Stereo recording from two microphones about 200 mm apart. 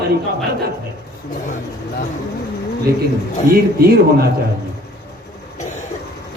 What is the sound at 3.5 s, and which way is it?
Speech, 50° right (ahead or behind).